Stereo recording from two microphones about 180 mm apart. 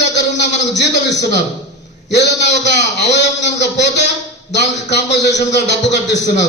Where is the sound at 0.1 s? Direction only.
70° left (ahead or behind).